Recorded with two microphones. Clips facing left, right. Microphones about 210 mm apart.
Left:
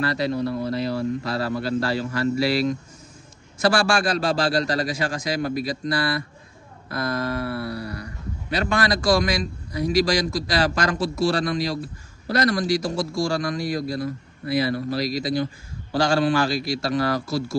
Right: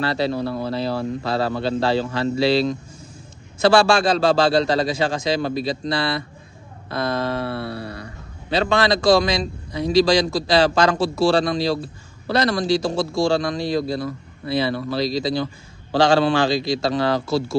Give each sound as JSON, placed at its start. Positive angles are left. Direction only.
{"t": 0.0, "sound": "speech", "side_deg": -30}